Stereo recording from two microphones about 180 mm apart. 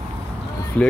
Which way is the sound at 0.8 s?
10° left (ahead or behind).